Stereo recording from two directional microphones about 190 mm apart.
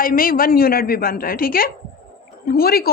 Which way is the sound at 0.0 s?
50° left (ahead or behind).